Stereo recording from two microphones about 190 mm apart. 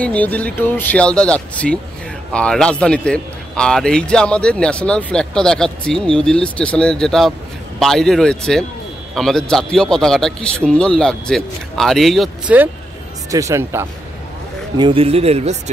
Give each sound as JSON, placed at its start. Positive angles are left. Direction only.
{"t": 0.0, "sound": "a man's voice", "side_deg": 5}
{"t": 13.3, "sound": "speech", "side_deg": -15}
{"t": 14.8, "sound": "speech", "side_deg": -30}